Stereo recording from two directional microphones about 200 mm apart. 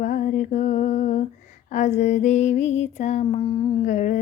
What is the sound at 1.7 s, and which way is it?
Mantra, 35° left (ahead or behind).